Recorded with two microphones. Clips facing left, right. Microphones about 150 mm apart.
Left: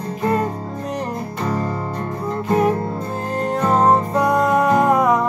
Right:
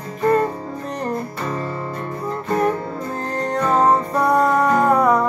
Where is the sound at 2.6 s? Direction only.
5° left (ahead or behind).